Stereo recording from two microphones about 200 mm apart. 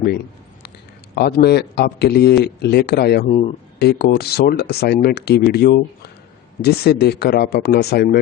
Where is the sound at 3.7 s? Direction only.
55° left (ahead or behind).